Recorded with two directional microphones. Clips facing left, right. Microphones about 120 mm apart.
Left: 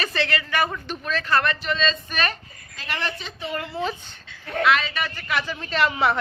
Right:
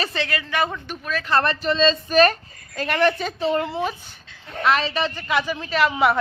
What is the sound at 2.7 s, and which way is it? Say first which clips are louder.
Speech: right 10 dB; 50° right (ahead or behind).